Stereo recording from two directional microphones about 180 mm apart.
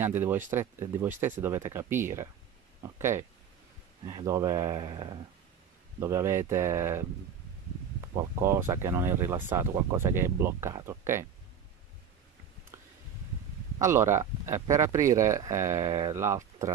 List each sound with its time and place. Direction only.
0.0 s speech: 10° right (ahead or behind)
8.2 s speech: 15° right (ahead or behind)
13.7 s speech: 15° right (ahead or behind)
15.8 s speech: 25° right (ahead or behind)
16.2 s speech: 15° right (ahead or behind)